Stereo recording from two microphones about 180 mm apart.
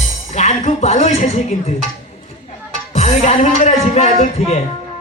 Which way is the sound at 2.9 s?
40° left (ahead or behind).